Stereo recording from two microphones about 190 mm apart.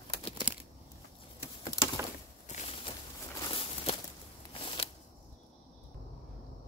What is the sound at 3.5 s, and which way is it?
Walk, 30° left (ahead or behind).